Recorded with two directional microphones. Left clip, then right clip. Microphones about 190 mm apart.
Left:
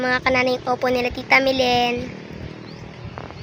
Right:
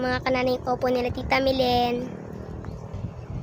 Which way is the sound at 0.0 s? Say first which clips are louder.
Left 5 dB; 5° left (ahead or behind).